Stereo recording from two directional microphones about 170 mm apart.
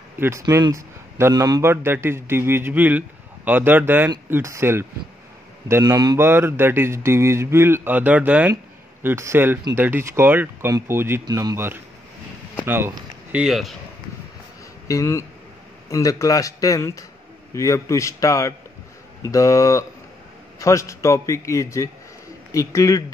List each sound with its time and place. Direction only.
0.2 s a man's voice: 15° right (ahead or behind); by 13.7 s centre (ahead or behind)
14.9 s a man's voice: 15° left (ahead or behind)